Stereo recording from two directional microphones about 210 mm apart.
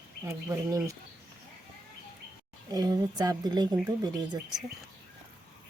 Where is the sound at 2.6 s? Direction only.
15° right (ahead or behind).